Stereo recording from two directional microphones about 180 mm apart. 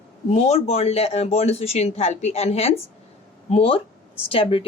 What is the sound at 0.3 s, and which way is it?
Speech, 35° left (ahead or behind).